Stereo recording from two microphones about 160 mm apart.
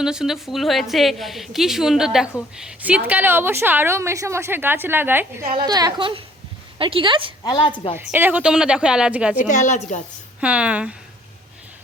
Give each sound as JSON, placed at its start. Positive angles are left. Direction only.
{"t": 0.0, "sound": "a woman's voice", "side_deg": -5}
{"t": 5.6, "sound": "a woman's voice", "side_deg": -25}
{"t": 7.4, "sound": "a woman's voice", "side_deg": 30}
{"t": 7.9, "sound": "a woman's voice", "side_deg": -15}
{"t": 9.4, "sound": "a woman's voice", "side_deg": 50}
{"t": 10.4, "sound": "a woman's voice", "side_deg": -10}